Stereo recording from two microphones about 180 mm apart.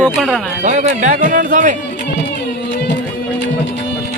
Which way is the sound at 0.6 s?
45° right (ahead or behind).